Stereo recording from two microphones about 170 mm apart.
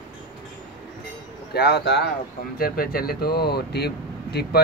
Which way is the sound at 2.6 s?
60° left (ahead or behind).